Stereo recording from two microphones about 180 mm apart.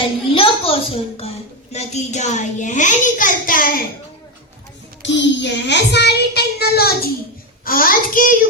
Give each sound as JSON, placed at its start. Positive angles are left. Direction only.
{"t": 0.0, "sound": "a woman's voice", "side_deg": 30}
{"t": 5.0, "sound": "a child's voice", "side_deg": 80}